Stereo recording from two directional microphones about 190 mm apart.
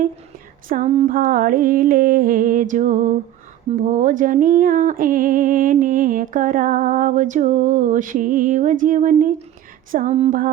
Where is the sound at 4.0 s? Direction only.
45° right (ahead or behind).